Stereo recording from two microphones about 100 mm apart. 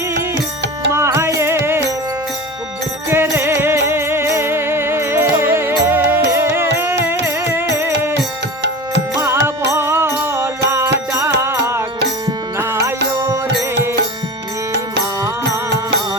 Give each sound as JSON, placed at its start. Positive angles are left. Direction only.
{"t": 0.9, "sound": "music", "side_deg": -25}
{"t": 3.1, "sound": "music", "side_deg": -25}